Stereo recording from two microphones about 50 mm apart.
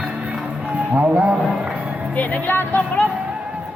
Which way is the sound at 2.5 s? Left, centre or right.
Left.